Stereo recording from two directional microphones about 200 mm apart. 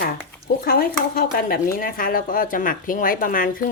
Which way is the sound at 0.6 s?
50° left (ahead or behind).